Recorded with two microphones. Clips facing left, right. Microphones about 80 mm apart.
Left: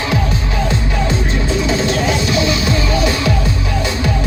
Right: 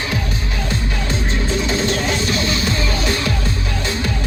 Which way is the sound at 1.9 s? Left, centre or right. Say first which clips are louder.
Left 3 dB; centre.